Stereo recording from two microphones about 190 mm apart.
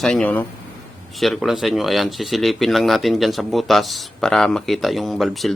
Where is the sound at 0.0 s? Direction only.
5° left (ahead or behind).